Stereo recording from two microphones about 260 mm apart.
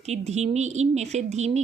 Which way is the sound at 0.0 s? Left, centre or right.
Right.